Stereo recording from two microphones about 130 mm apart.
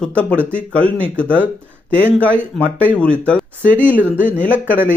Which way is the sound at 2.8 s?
10° left (ahead or behind).